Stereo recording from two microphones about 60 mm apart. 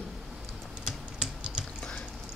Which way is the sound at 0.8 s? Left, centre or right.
Centre.